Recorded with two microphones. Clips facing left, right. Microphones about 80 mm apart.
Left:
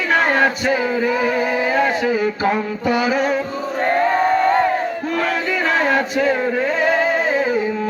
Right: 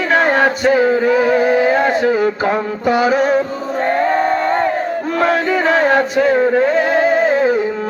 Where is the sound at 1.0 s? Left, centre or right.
Right.